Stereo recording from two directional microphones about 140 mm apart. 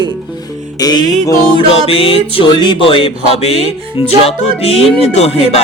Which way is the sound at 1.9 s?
40° left (ahead or behind).